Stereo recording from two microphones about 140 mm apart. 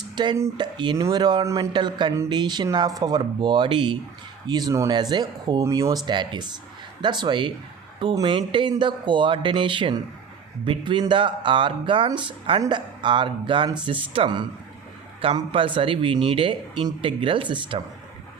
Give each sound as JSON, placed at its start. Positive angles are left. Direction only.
{"t": 0.2, "sound": "speech", "side_deg": -30}